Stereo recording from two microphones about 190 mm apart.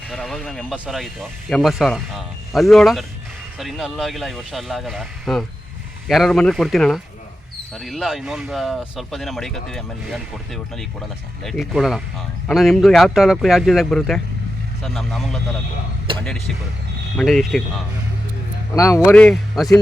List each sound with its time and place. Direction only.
0.1 s speech: centre (ahead or behind)
16.1 s speech: 25° right (ahead or behind)
17.2 s speech: centre (ahead or behind)
18.8 s speech: 15° left (ahead or behind)